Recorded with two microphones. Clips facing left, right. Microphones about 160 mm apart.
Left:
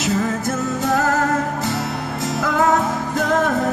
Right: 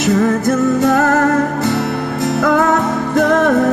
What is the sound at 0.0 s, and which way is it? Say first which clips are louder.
Music: right 7 dB; 60° right (ahead or behind).